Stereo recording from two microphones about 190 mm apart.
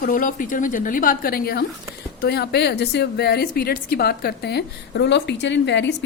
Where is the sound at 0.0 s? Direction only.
45° left (ahead or behind).